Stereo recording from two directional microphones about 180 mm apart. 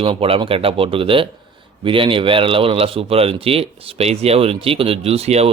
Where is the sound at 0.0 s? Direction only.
30° right (ahead or behind).